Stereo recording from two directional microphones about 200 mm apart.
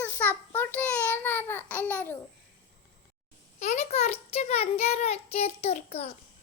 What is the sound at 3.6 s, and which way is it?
A child's voice, 35° left (ahead or behind).